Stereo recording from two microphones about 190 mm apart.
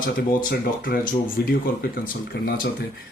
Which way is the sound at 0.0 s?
50° left (ahead or behind).